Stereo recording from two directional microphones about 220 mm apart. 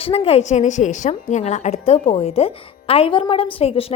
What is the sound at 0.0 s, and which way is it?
A woman's voice, 25° left (ahead or behind).